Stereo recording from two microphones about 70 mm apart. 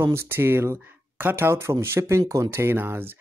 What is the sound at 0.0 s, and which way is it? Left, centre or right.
Speech, right.